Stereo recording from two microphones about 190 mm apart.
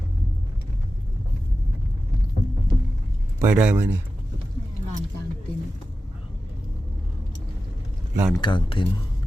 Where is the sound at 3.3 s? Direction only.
5° right (ahead or behind).